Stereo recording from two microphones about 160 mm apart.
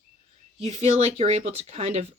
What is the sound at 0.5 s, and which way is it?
Speech, 40° right (ahead or behind).